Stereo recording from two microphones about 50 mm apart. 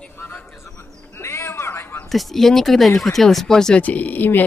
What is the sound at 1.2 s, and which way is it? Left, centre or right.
Cat, left.